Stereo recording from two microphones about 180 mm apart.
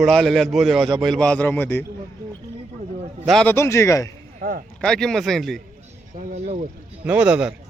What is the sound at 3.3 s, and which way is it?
Speech, 5° left (ahead or behind).